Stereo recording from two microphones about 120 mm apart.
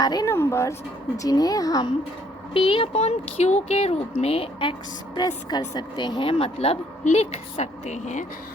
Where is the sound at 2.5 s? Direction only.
50° left (ahead or behind).